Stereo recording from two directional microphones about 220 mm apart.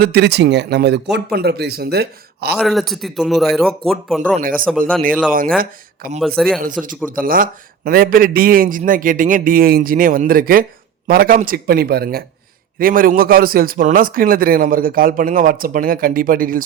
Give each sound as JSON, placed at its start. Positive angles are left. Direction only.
{"t": 0.0, "sound": "speech", "side_deg": -45}
{"t": 2.6, "sound": "speech", "side_deg": 0}
{"t": 4.4, "sound": "a man's voice", "side_deg": -40}
{"t": 6.1, "sound": "speech", "side_deg": 0}
{"t": 6.6, "sound": "a man's voice", "side_deg": -40}